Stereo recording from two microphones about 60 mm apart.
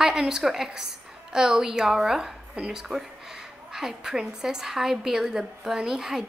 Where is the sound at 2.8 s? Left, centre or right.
Centre.